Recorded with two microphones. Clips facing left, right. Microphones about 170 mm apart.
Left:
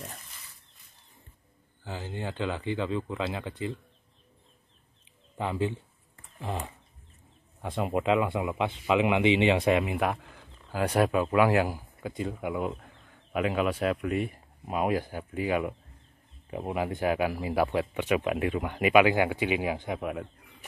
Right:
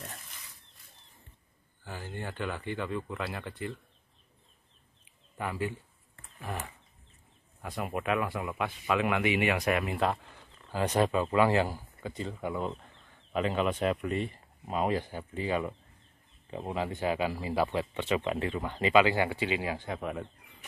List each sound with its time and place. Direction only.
1.9 s speech: 20° left (ahead or behind)
5.0 s a sound: 20° left (ahead or behind)
7.6 s speech: 25° left (ahead or behind); by 20.2 s 5° left (ahead or behind)